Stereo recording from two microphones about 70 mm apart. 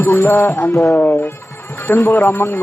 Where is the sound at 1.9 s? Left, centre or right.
Left.